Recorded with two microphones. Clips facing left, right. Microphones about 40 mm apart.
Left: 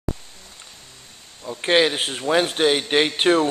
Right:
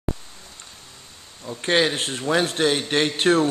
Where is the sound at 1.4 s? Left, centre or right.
Centre.